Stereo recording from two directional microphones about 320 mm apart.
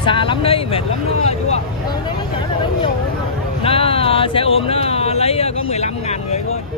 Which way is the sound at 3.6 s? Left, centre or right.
Centre.